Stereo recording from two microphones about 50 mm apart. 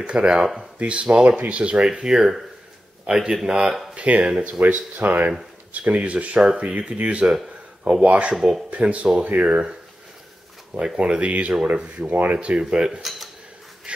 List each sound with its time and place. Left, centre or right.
0.0 s speech: right
3.9 s speech: right
8.4 s speech: centre
8.6 s speech: right
11.0 s speech: right
12.0 s speech: centre
13.9 s a sound: right